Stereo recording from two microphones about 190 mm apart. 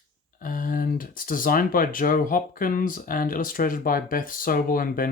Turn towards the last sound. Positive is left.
turn(degrees=45)  # may be behind; listen again after turning